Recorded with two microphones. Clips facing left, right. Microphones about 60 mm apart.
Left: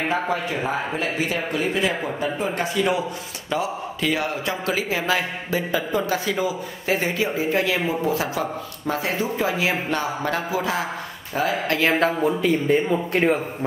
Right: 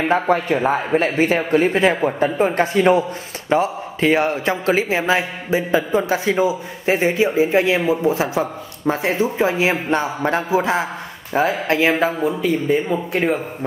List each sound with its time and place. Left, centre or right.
0.1 s speech: right
12.0 s a man's voice: centre